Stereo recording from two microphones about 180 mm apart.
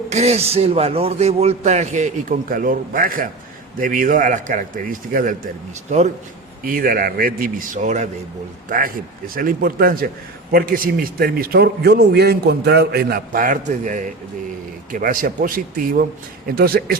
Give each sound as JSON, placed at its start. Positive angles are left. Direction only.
{"t": 0.1, "sound": "speech", "side_deg": -35}
{"t": 6.7, "sound": "speech", "side_deg": -55}
{"t": 9.3, "sound": "a man's voice", "side_deg": -50}